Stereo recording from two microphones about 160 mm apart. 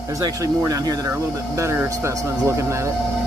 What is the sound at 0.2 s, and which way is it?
Speech, 20° right (ahead or behind).